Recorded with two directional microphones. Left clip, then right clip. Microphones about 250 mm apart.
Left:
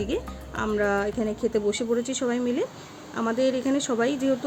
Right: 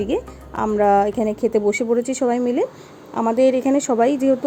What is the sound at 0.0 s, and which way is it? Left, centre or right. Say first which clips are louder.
Speech: right 6 dB; centre.